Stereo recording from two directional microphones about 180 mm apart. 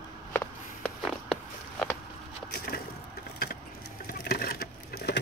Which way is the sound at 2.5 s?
55° left (ahead or behind).